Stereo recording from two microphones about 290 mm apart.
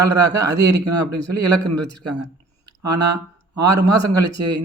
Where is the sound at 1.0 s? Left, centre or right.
Right.